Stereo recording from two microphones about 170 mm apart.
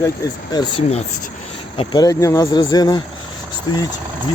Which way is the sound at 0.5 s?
30° left (ahead or behind).